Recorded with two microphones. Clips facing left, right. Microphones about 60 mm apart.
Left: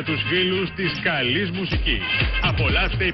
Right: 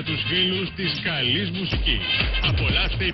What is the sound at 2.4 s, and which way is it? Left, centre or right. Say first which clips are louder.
Speech: left 3 dB; left.